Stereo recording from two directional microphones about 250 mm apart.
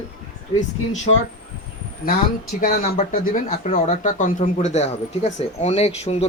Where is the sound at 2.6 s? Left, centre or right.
Left.